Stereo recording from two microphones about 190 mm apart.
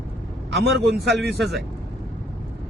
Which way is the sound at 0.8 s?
60° right (ahead or behind).